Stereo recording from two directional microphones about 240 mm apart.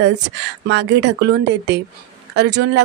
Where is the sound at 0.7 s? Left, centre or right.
Right.